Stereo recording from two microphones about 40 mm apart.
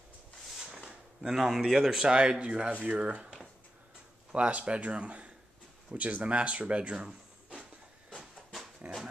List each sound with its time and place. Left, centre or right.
1.2 s speech: centre; by 3.3 s right
4.3 s speech: right
5.9 s speech: right
7.1 s a sound: centre
8.8 s dog: right